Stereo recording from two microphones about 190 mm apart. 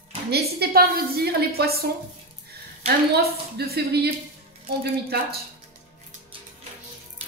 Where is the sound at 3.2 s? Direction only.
55° right (ahead or behind).